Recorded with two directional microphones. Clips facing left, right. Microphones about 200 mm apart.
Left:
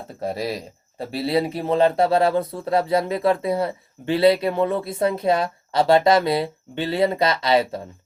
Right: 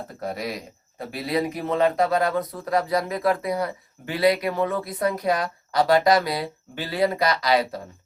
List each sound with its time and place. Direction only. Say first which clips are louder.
0.2 s speech: left 4 dB; 30° left (ahead or behind)